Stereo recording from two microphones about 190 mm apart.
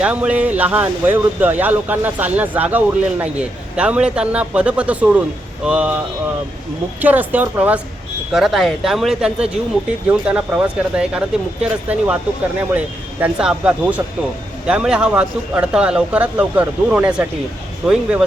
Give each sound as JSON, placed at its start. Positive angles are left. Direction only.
{"t": 0.0, "sound": "speech", "side_deg": -5}
{"t": 7.0, "sound": "speech", "side_deg": -10}